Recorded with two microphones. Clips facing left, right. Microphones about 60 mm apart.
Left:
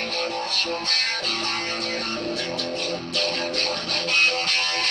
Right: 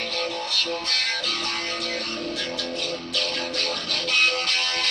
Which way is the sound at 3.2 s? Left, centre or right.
Left.